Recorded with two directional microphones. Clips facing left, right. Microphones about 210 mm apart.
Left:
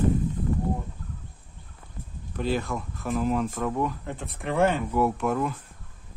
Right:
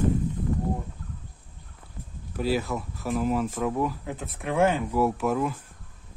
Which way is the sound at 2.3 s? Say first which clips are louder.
Right 1 dB; 5° right (ahead or behind).